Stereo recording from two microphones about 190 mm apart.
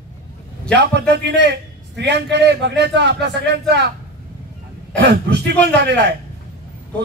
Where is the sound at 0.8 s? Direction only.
65° right (ahead or behind).